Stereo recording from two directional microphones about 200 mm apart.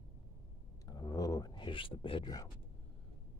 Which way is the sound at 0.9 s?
20° left (ahead or behind).